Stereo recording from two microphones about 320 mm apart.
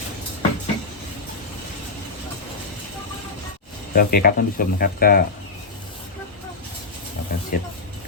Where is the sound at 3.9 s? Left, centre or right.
Left.